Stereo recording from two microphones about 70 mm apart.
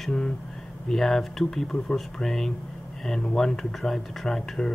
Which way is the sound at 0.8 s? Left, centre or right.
Centre.